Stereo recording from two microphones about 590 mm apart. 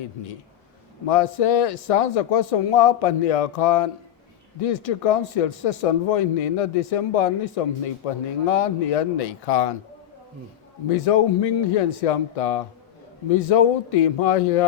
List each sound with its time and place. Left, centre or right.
1.0 s speech: left
10.8 s speech: left